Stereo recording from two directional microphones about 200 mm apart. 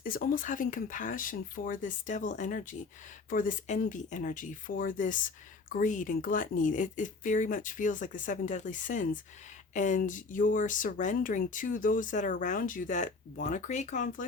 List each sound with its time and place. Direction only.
0.0 s speech: 45° left (ahead or behind)